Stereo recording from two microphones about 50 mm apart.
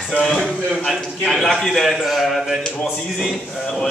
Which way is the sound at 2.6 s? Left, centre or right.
Centre.